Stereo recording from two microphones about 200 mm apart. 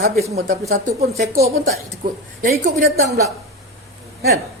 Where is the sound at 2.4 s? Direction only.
40° right (ahead or behind).